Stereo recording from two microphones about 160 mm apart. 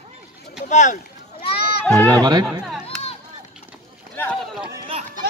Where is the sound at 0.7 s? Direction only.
50° left (ahead or behind).